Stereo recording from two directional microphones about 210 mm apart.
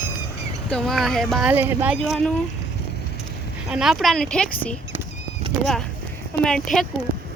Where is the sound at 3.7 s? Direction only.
Centre (ahead or behind).